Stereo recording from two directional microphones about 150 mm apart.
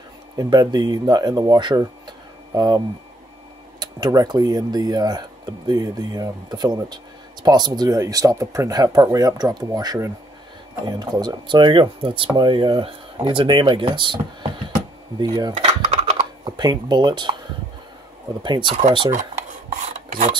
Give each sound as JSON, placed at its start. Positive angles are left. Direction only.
{"t": 0.4, "sound": "speech", "side_deg": -25}
{"t": 3.8, "sound": "speech", "side_deg": -25}
{"t": 15.1, "sound": "cutlery", "side_deg": -25}
{"t": 16.4, "sound": "speech", "side_deg": -30}
{"t": 18.4, "sound": "speech", "side_deg": -30}
{"t": 18.8, "sound": "speech", "side_deg": -45}